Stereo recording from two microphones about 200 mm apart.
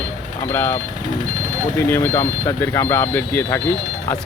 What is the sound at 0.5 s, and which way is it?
Speech, 10° left (ahead or behind).